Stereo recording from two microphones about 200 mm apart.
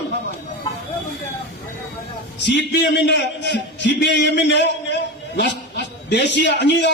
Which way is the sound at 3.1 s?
60° left (ahead or behind).